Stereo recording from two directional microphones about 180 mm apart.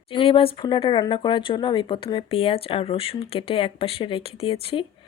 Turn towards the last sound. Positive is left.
turn(degrees=30)  # may be behind; listen again after turning